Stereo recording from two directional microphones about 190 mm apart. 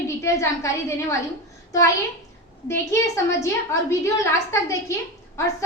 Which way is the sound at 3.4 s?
15° left (ahead or behind).